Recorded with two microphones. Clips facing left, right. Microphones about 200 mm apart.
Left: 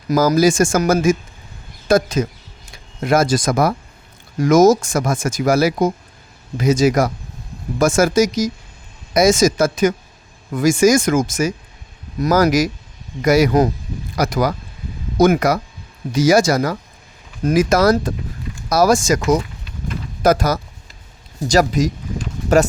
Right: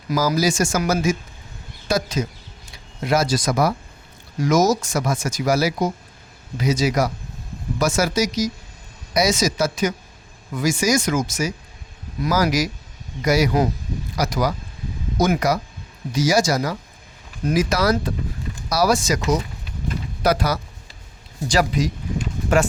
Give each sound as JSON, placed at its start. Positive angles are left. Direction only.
{"t": 0.1, "sound": "speech", "side_deg": 50}